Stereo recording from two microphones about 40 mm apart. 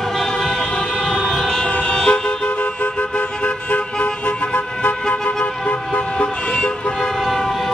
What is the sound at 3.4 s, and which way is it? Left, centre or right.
Vehicle, left.